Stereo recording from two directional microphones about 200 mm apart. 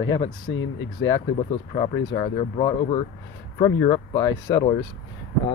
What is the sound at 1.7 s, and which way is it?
Speech, 25° left (ahead or behind).